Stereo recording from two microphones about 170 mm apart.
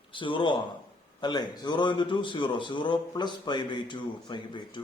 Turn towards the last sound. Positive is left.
turn(degrees=25)  # may be behind; listen again after turning